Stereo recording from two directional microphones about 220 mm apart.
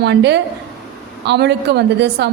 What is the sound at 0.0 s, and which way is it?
A woman's voice, 50° right (ahead or behind).